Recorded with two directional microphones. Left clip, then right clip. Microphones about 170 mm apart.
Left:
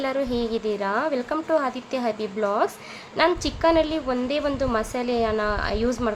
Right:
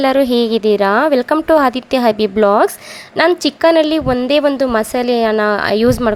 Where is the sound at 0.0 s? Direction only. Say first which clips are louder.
Right 12 dB; 55° right (ahead or behind).